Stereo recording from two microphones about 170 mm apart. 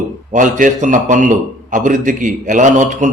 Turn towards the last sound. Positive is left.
turn(degrees=-45)  # may be behind; listen again after turning